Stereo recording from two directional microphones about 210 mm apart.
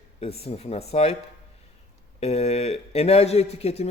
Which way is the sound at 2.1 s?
30° left (ahead or behind).